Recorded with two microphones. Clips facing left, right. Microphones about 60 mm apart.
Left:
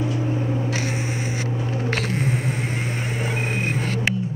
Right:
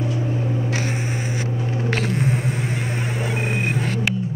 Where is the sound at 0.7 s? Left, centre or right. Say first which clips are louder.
Right 1 dB; right.